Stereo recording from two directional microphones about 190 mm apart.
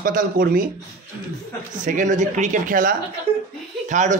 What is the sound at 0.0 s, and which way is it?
Speech, 45° right (ahead or behind).